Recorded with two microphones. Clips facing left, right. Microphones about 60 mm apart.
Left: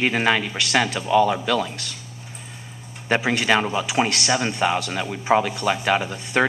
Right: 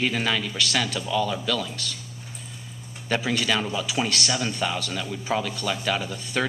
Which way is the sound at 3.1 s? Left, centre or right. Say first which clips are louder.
Left 5 dB; left.